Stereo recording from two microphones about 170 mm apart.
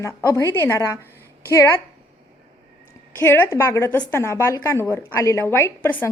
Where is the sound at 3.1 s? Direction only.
15° left (ahead or behind).